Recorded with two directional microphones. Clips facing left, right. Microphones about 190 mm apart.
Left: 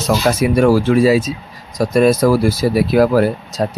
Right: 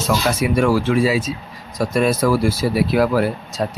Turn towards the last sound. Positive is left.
turn(degrees=45)  # may be behind; listen again after turning